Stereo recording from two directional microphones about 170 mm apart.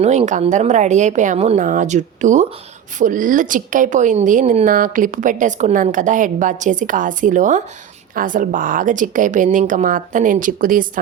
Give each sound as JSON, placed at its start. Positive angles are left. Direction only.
{"t": 0.0, "sound": "a woman's voice", "side_deg": -40}